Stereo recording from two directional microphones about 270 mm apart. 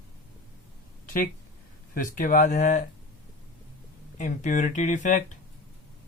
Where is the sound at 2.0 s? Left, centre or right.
Left.